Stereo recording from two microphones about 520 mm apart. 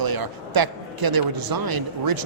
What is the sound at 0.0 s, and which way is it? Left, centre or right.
A man's voice, right.